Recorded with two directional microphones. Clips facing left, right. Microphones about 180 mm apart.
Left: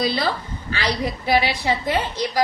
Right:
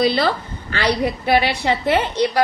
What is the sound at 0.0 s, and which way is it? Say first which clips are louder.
A woman's voice: right 5 dB; 60° right (ahead or behind).